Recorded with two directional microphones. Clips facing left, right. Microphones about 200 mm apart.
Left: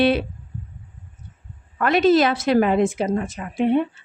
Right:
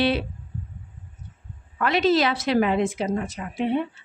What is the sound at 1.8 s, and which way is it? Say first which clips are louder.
Speech: left 4 dB; 50° left (ahead or behind).